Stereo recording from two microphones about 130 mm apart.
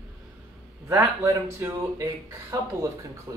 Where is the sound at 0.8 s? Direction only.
20° right (ahead or behind).